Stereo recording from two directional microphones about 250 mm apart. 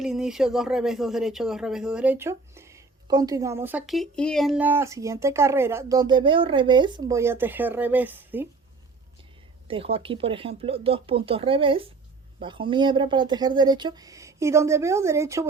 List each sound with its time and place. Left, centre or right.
0.0 s speech: centre
9.6 s speech: right